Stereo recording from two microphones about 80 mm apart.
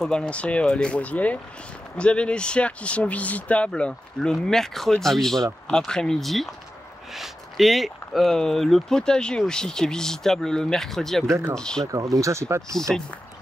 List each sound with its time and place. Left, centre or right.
0.0 s speech: centre
11.9 s speech: right
12.7 s speech: centre